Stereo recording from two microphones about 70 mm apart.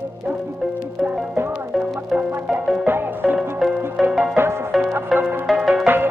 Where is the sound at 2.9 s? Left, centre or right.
Right.